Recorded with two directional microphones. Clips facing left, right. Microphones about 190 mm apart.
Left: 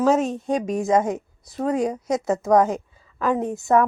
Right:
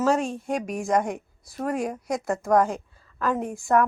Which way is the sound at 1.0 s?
20° left (ahead or behind).